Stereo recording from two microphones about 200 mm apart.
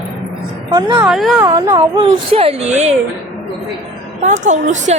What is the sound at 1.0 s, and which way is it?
Speech, centre (ahead or behind).